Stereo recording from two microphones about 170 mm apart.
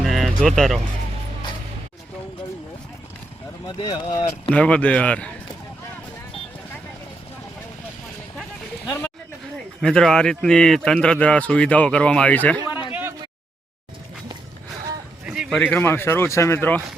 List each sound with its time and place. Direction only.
0.0 s music: centre (ahead or behind)
3.8 s speech: 25° left (ahead or behind)
4.4 s speech: 5° left (ahead or behind)
9.8 s a man's voice: 5° left (ahead or behind)
12.9 s a sound: 10° right (ahead or behind)
15.2 s a sound: 5° right (ahead or behind)
15.5 s speech: 10° left (ahead or behind)